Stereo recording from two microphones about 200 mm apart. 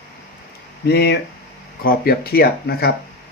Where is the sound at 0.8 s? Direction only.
55° left (ahead or behind).